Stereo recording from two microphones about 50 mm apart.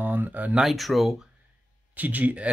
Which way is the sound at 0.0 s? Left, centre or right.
Right.